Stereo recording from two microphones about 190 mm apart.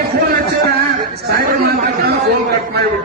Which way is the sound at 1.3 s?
50° right (ahead or behind).